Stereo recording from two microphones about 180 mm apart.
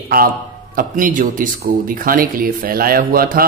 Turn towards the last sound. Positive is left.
turn(degrees=-55)  # may be behind; listen again after turning